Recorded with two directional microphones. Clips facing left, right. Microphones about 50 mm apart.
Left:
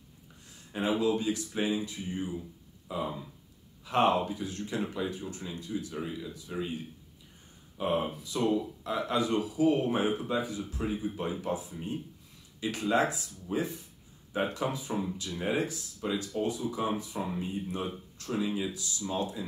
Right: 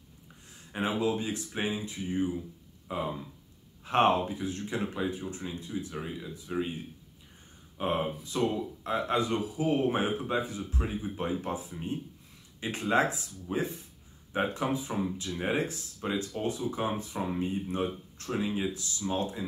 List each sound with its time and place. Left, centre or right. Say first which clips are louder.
0.7 s speech: left 1 dB; right
7.7 s speech: even; right
12.5 s a sound: left 1 dB; right
12.9 s speech: right 2 dB; right